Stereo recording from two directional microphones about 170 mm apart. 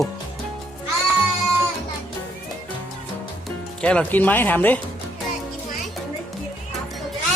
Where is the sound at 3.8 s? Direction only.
10° left (ahead or behind).